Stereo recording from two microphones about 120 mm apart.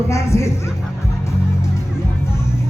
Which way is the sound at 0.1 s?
25° left (ahead or behind).